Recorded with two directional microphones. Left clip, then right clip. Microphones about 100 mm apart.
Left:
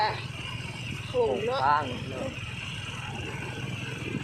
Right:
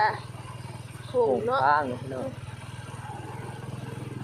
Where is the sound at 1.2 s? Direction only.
35° right (ahead or behind).